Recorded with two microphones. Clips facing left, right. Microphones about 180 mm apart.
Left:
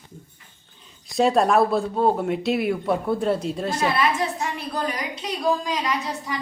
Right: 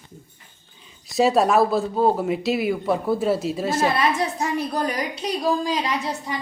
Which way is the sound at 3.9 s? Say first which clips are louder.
Right 1 dB; 40° right (ahead or behind).